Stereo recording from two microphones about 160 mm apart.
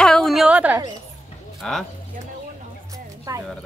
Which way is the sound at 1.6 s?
5° left (ahead or behind).